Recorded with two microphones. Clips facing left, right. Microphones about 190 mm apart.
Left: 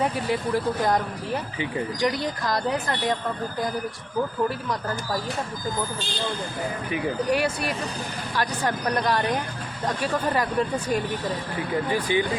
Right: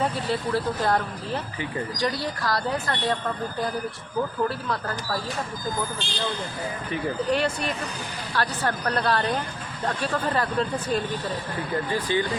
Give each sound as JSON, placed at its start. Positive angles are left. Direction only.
{"t": 0.0, "sound": "speech", "side_deg": 15}
{"t": 4.4, "sound": "speech", "side_deg": 15}
{"t": 6.9, "sound": "speech", "side_deg": 10}